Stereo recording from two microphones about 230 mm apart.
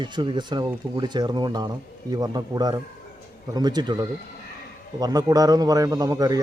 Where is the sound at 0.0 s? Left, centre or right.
Centre.